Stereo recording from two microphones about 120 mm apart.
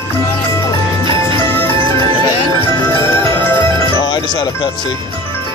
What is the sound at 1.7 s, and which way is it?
Music, 45° right (ahead or behind).